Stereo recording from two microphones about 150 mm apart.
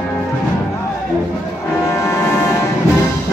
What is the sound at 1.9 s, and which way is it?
Music, 20° left (ahead or behind).